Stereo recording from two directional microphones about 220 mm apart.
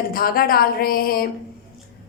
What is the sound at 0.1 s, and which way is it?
A woman's voice, 40° left (ahead or behind).